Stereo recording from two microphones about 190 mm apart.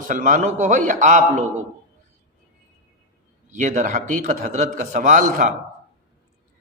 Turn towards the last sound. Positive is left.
turn(degrees=-45)  # may be behind; listen again after turning